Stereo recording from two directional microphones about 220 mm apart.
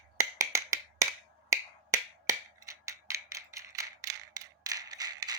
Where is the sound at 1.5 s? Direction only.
15° right (ahead or behind).